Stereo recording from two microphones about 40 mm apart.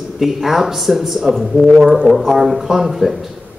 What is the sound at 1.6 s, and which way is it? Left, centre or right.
A man's voice, centre.